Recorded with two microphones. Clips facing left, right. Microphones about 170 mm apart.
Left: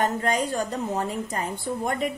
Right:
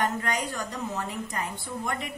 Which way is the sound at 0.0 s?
35° left (ahead or behind).